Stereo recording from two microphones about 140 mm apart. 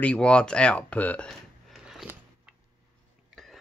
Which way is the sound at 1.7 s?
Centre (ahead or behind).